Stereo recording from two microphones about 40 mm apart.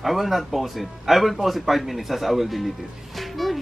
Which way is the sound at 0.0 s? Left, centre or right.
Centre.